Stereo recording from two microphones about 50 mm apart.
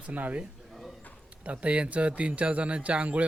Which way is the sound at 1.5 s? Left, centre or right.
Right.